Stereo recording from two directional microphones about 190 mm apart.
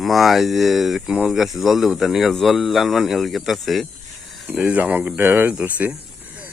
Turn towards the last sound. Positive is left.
turn(degrees=-5)  # may be behind; listen again after turning